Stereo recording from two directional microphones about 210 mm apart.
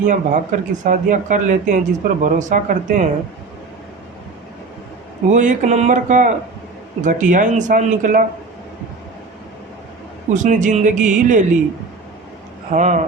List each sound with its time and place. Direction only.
0.0 s speech: 35° right (ahead or behind)
5.3 s speech: 35° right (ahead or behind)
10.3 s speech: 35° right (ahead or behind)
12.7 s speech: 35° right (ahead or behind)